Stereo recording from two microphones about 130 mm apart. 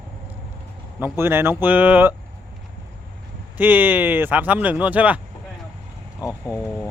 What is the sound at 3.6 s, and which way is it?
Speech, 15° right (ahead or behind).